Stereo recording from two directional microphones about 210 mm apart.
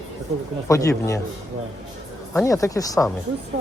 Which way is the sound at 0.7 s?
15° left (ahead or behind).